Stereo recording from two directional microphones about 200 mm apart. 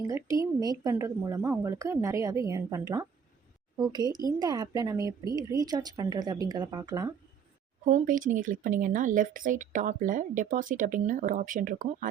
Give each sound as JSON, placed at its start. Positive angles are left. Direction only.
{"t": 0.1, "sound": "a woman's voice", "side_deg": -15}
{"t": 7.9, "sound": "speech", "side_deg": -40}